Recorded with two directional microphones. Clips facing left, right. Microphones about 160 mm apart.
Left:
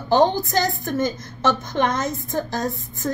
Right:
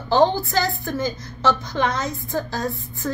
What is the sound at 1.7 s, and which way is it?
Speech, 45° left (ahead or behind).